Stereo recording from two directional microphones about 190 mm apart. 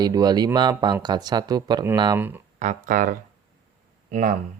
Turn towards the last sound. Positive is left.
turn(degrees=-45)  # may be behind; listen again after turning